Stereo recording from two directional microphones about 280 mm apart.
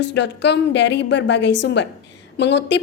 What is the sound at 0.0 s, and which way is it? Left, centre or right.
A woman's voice, left.